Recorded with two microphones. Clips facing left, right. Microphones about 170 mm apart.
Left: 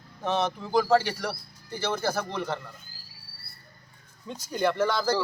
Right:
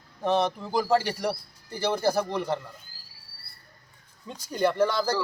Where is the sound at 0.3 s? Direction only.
35° right (ahead or behind).